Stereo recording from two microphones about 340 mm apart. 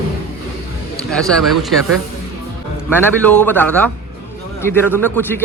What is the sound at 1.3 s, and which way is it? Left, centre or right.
Speech, centre.